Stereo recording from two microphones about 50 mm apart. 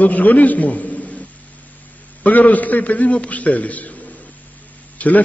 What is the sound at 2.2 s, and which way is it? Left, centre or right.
A man's voice, left.